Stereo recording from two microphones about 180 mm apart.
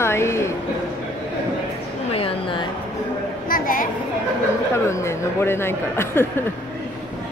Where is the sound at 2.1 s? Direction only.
30° left (ahead or behind).